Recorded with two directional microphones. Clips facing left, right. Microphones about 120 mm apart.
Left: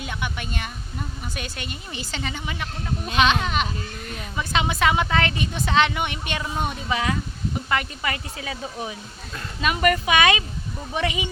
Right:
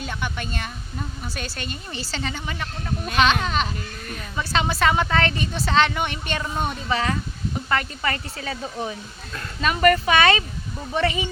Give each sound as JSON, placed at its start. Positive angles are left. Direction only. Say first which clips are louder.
{"t": 0.0, "sound": "a woman's voice", "louder": "right 1 dB", "side_deg": 10}